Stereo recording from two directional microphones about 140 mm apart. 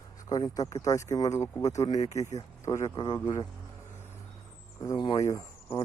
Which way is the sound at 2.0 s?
55° left (ahead or behind).